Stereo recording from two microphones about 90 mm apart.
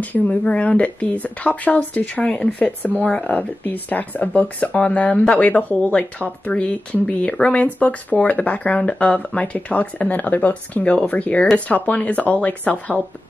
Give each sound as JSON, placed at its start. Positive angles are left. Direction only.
{"t": 0.0, "sound": "speech", "side_deg": 15}